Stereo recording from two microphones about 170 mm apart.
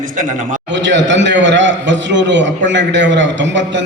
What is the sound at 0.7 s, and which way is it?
A man's voice, 90° right.